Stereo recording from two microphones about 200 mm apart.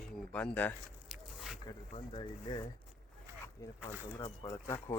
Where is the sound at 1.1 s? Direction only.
Centre (ahead or behind).